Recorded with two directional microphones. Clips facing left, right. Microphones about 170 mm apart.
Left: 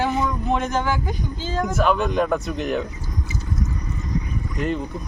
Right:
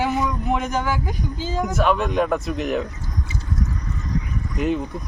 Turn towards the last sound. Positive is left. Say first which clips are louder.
# right 2 dB
turn(degrees=-5)  # may be behind; listen again after turning